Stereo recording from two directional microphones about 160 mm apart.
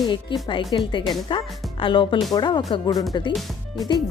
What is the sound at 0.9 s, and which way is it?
Speech, 30° left (ahead or behind).